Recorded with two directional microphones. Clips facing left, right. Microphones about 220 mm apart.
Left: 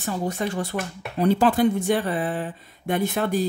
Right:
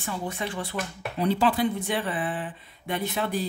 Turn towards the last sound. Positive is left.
turn(degrees=45)  # may be behind; listen again after turning